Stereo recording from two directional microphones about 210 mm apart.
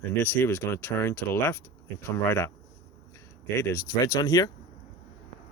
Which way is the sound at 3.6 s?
15° left (ahead or behind).